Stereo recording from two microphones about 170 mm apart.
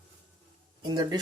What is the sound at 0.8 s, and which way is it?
Speech, 25° right (ahead or behind).